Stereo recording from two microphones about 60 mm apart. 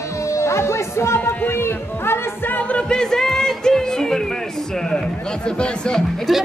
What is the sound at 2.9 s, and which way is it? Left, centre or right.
Music, centre.